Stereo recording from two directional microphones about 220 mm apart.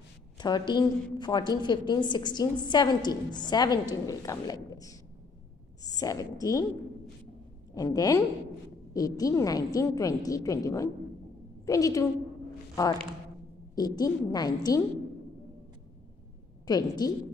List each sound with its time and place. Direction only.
0.4 s a woman's voice: 20° left (ahead or behind)
7.7 s a woman's voice: 15° left (ahead or behind)
13.7 s a woman's voice: 20° left (ahead or behind)
16.6 s a woman's voice: 15° left (ahead or behind)